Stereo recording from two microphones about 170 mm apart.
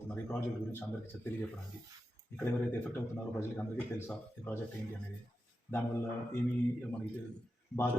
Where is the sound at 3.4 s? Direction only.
10° left (ahead or behind).